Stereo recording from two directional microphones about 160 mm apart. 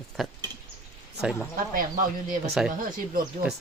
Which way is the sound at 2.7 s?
60° right (ahead or behind).